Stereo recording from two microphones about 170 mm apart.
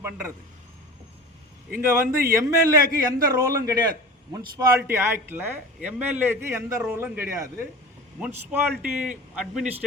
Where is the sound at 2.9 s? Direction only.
55° right (ahead or behind).